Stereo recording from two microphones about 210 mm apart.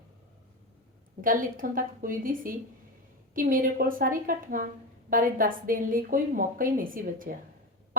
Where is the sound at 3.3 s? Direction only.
40° right (ahead or behind).